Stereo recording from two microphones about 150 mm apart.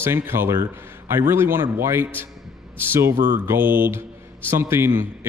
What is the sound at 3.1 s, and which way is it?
Mantra, 65° right (ahead or behind).